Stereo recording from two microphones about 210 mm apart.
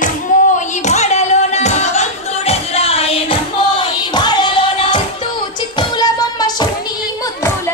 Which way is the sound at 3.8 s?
20° left (ahead or behind).